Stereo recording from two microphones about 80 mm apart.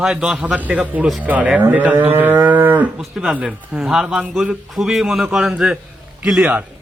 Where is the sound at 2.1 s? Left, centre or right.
Right.